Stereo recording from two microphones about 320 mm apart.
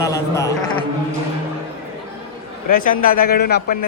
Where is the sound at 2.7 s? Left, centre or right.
Left.